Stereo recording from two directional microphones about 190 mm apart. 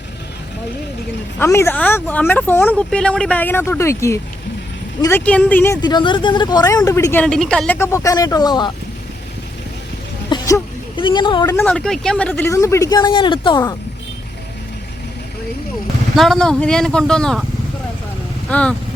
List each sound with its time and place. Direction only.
1.4 s speech: 15° left (ahead or behind)
10.2 s a sound: 20° left (ahead or behind)
11.4 s speech: 10° left (ahead or behind); by 13.6 s 25° left (ahead or behind)
16.1 s speech: centre (ahead or behind)
18.4 s speech: 5° left (ahead or behind)